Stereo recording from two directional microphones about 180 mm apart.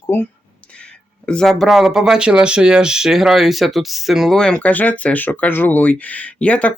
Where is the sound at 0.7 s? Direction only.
5° left (ahead or behind).